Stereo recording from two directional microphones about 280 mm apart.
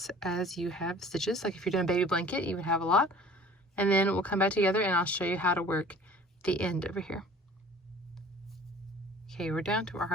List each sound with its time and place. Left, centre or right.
0.0 s speech: centre
9.3 s speech: centre